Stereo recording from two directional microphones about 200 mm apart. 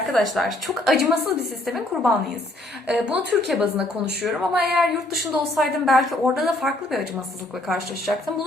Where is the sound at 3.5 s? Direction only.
5° right (ahead or behind).